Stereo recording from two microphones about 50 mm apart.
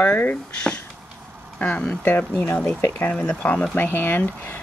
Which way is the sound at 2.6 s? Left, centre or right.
Left.